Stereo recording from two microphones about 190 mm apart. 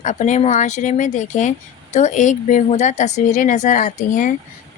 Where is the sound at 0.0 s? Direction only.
40° left (ahead or behind).